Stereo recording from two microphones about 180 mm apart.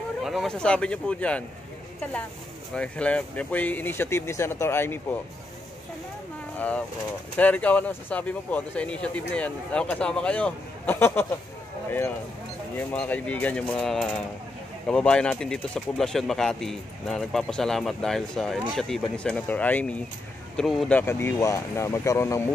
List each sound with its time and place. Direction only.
0.2 s speech: centre (ahead or behind)
2.7 s speech: 5° left (ahead or behind)
7.3 s speech: 10° left (ahead or behind)
12.7 s speech: 10° left (ahead or behind)
21.0 s speech: 15° left (ahead or behind)